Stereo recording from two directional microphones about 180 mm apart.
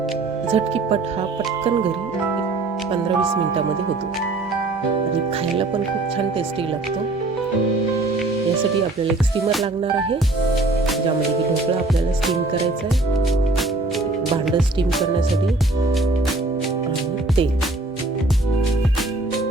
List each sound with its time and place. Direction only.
0.5 s speech: 35° right (ahead or behind)